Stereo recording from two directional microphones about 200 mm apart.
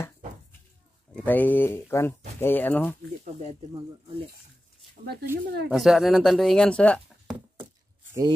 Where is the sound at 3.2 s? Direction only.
35° right (ahead or behind).